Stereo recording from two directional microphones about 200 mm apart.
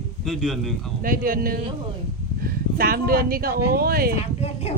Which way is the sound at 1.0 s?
45° right (ahead or behind).